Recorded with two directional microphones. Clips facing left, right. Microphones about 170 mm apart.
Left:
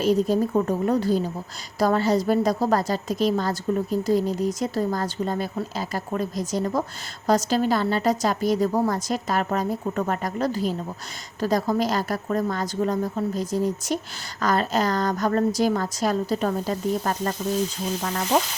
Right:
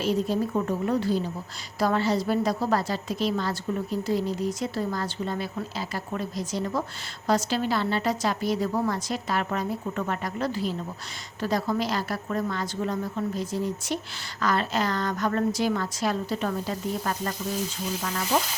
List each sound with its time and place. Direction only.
0.0 s a woman's voice: 40° left (ahead or behind)